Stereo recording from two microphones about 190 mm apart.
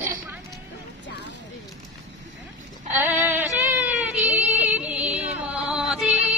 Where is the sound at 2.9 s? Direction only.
10° right (ahead or behind).